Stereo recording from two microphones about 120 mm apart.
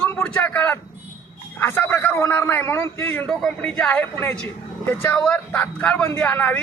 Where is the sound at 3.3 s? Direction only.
5° left (ahead or behind).